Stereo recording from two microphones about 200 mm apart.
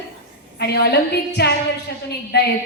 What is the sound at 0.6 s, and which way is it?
A woman's voice, 55° left (ahead or behind).